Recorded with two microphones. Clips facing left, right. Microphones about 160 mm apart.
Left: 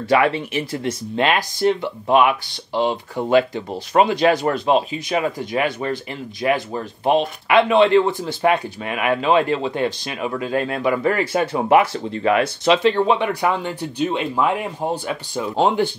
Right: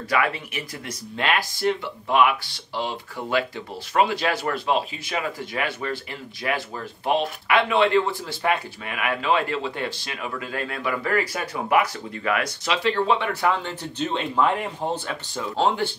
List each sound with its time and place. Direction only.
0.1 s speech: 25° left (ahead or behind)